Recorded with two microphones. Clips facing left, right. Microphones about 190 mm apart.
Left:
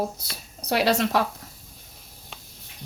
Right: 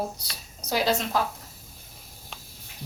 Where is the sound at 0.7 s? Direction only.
70° left (ahead or behind).